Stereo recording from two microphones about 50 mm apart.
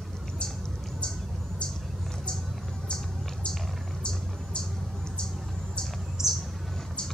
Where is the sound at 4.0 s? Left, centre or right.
Centre.